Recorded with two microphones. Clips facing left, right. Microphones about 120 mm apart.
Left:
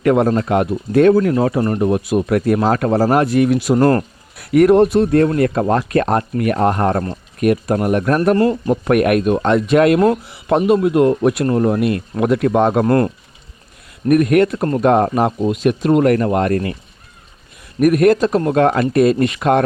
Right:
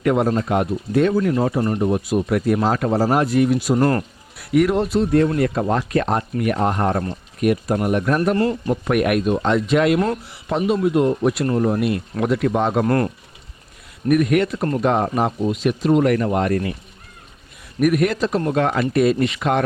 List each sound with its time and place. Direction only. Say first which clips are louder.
0.0 s speech: left 4 dB; 55° left (ahead or behind)
1.8 s speech: left 3 dB; 75° left (ahead or behind)
3.8 s speech: left 6 dB; 40° left (ahead or behind)
4.5 s speech: left 7 dB; 55° left (ahead or behind)
12.8 s speech: left 4 dB; 35° left (ahead or behind)
14.1 s speech: left 4 dB; 45° left (ahead or behind)
17.7 s speech: left 6 dB; 40° left (ahead or behind)